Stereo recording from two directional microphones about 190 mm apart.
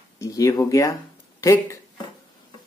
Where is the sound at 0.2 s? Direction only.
15° left (ahead or behind).